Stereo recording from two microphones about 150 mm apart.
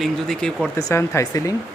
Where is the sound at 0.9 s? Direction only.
20° left (ahead or behind).